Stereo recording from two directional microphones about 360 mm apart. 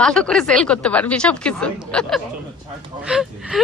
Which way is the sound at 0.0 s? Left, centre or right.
Centre.